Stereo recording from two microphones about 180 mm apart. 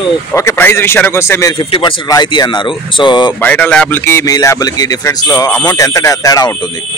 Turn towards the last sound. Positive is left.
turn(degrees=20)  # may be behind; listen again after turning